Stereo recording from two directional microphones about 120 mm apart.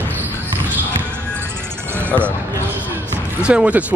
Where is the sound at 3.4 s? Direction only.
10° right (ahead or behind).